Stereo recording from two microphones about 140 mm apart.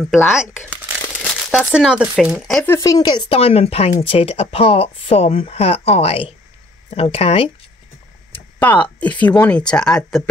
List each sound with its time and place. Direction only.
0.1 s speech: 5° right (ahead or behind)
1.5 s speech: centre (ahead or behind)
2.6 s speech: 20° left (ahead or behind); by 7.5 s 45° left (ahead or behind)
8.5 s speech: 10° left (ahead or behind)